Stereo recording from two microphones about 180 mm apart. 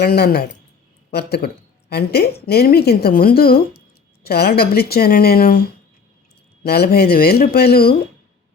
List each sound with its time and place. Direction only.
0.0 s speech: 60° left (ahead or behind)